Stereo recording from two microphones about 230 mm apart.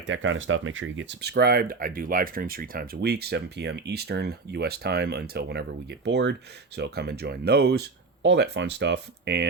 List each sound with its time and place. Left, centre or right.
0.0 s speech: right